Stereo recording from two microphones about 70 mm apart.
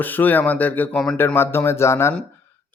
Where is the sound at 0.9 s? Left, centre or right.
Centre.